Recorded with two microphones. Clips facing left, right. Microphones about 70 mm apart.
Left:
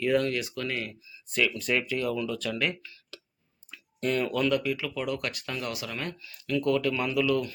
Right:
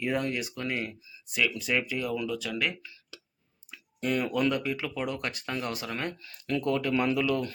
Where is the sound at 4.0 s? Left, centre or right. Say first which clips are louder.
Left 1 dB; centre.